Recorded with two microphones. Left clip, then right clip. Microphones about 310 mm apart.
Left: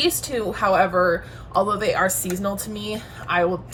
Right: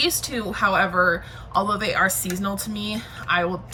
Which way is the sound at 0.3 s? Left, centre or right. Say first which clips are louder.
Left 2 dB; centre.